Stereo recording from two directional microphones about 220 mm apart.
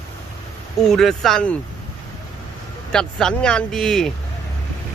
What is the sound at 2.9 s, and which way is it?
Speech, 5° left (ahead or behind).